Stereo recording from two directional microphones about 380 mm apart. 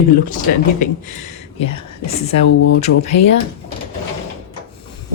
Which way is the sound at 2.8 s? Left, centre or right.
Centre.